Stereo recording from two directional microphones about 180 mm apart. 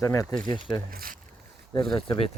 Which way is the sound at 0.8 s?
55° right (ahead or behind).